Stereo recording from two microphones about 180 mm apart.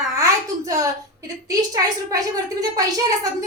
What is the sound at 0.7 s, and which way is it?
A woman's voice, 20° right (ahead or behind).